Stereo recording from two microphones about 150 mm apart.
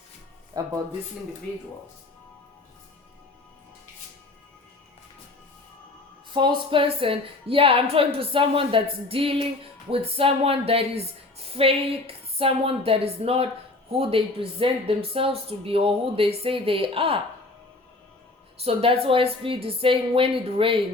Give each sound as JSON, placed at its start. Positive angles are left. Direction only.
{"t": 0.6, "sound": "speech", "side_deg": -25}
{"t": 6.3, "sound": "a woman's voice", "side_deg": -35}
{"t": 18.6, "sound": "a woman's voice", "side_deg": -40}